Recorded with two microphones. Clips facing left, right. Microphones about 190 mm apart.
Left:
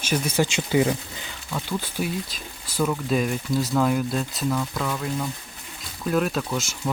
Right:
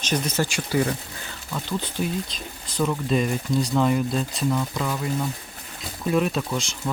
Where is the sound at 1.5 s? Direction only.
5° left (ahead or behind).